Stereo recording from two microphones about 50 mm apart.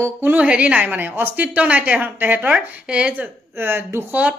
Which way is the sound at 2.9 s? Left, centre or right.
Right.